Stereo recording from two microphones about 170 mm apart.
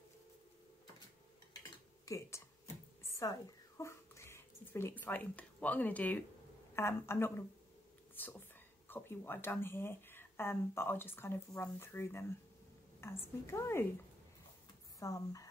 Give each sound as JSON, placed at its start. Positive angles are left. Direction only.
{"t": 2.0, "sound": "a sound", "side_deg": 15}
{"t": 6.7, "sound": "speech", "side_deg": 15}
{"t": 15.0, "sound": "speech", "side_deg": 20}